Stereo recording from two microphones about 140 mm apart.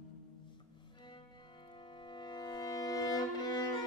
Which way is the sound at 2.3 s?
30° left (ahead or behind).